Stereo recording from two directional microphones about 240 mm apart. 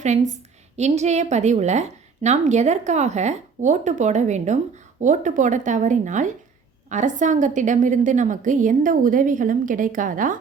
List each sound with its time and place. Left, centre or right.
0.8 s a woman's voice: right